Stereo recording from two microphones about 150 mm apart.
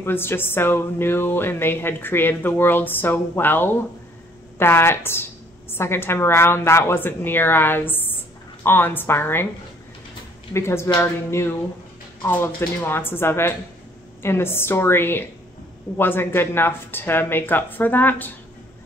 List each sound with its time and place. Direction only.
0.0 s music: 15° left (ahead or behind)
10.5 s music: 15° left (ahead or behind)